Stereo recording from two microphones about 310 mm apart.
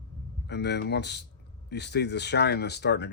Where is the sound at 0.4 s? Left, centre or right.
Left.